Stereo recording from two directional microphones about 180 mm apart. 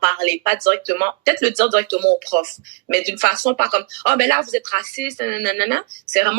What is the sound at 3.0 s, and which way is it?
A woman's voice, 60° right (ahead or behind).